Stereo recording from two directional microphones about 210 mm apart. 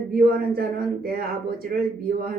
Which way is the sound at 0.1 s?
45° right (ahead or behind).